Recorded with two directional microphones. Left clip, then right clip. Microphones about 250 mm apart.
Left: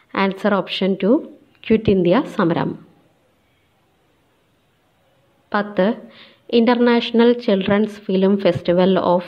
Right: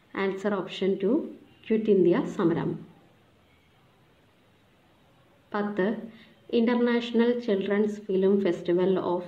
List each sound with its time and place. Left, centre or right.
0.1 s speech: left
5.5 s a woman's voice: left